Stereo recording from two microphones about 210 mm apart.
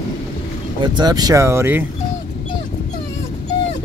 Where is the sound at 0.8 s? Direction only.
20° right (ahead or behind).